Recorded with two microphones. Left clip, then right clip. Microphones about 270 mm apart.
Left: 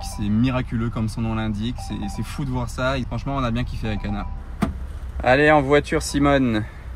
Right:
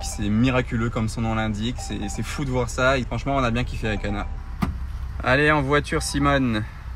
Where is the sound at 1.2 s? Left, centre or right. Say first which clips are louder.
Right 2 dB; right.